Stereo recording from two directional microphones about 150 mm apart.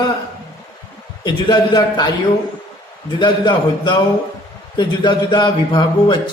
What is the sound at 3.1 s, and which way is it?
A man's voice, 30° left (ahead or behind).